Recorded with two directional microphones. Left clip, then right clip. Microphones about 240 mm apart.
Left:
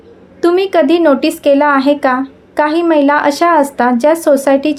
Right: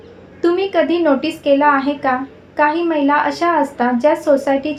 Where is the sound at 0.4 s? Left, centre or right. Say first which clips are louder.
Left 5 dB; left.